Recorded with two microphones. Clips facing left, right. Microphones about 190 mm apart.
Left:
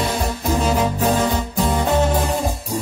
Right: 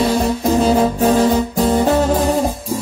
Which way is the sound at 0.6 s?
35° right (ahead or behind).